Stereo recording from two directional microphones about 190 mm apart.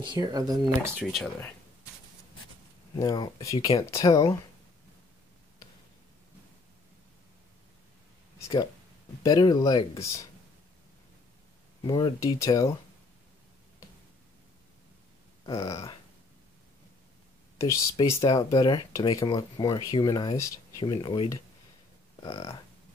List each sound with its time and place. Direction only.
0.0 s speech: 20° right (ahead or behind)
0.9 s speech: centre (ahead or behind)
3.0 s speech: 20° left (ahead or behind)
9.2 s speech: 20° left (ahead or behind)
11.8 s speech: 20° left (ahead or behind)
15.4 s speech: 20° left (ahead or behind)
17.6 s speech: 15° left (ahead or behind)